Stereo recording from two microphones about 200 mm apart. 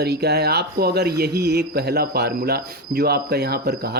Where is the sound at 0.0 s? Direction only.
55° right (ahead or behind).